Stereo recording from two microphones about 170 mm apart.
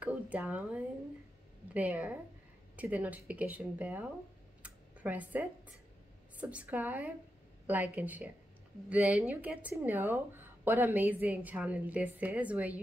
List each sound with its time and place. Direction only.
0.0 s a woman's voice: 10° right (ahead or behind)
4.6 s a sound: 10° right (ahead or behind)
6.4 s a woman's voice: 10° right (ahead or behind)